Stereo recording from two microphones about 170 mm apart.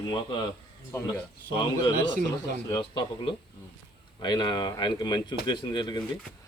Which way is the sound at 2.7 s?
30° left (ahead or behind).